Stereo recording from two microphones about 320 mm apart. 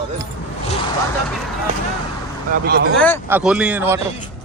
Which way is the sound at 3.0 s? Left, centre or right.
Centre.